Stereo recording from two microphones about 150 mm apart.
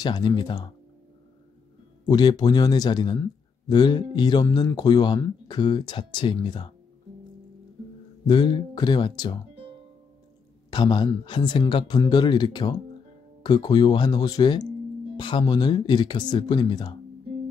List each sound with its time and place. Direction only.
0.0 s speech: 30° left (ahead or behind)
2.0 s speech: 25° left (ahead or behind)
8.3 s speech: 30° left (ahead or behind)
10.7 s speech: 30° left (ahead or behind)